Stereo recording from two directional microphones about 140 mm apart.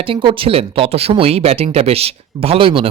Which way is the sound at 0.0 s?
40° right (ahead or behind).